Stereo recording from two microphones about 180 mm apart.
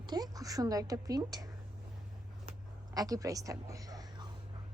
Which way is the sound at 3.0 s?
20° right (ahead or behind).